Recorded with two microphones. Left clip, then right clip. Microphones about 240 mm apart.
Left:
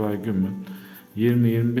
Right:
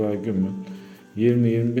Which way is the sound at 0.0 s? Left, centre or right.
Centre.